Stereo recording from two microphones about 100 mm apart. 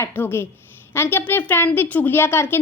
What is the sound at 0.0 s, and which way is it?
A woman's voice, 20° left (ahead or behind).